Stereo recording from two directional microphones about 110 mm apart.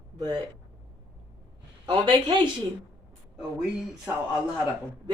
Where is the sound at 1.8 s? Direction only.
55° right (ahead or behind).